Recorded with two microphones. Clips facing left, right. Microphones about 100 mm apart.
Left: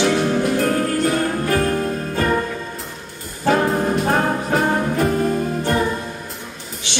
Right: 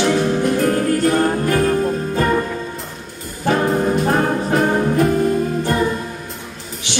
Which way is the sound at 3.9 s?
Centre (ahead or behind).